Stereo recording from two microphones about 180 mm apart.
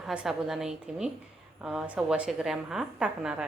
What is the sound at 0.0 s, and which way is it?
A woman's voice, 5° right (ahead or behind).